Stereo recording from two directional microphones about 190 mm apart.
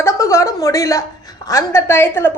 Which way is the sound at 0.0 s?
15° left (ahead or behind).